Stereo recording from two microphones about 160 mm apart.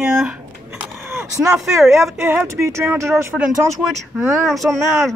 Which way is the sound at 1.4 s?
Centre (ahead or behind).